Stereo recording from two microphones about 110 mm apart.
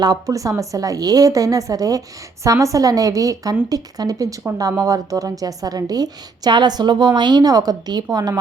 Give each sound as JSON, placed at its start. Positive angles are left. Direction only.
{"t": 0.0, "sound": "a woman's voice", "side_deg": -35}